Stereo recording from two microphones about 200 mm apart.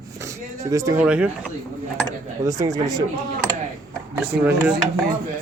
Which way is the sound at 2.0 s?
15° right (ahead or behind).